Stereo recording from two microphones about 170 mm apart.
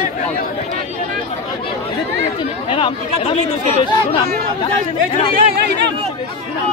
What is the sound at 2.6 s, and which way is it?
Speech, 30° left (ahead or behind).